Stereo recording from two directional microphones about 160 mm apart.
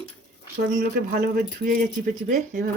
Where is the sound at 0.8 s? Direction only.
70° right (ahead or behind).